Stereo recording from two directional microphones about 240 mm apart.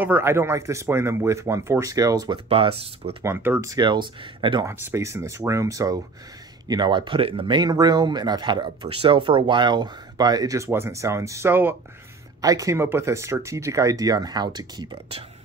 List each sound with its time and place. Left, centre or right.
0.0 s speech: centre
3.3 s speech: centre